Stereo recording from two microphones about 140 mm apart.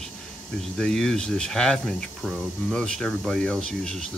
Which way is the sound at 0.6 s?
5° left (ahead or behind).